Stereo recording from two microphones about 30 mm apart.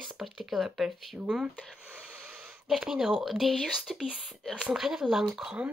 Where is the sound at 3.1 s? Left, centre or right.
Centre.